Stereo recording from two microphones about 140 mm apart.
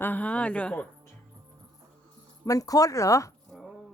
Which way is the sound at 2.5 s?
25° left (ahead or behind).